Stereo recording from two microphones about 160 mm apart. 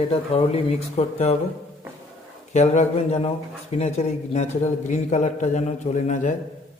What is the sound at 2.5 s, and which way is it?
A man's voice, 45° left (ahead or behind).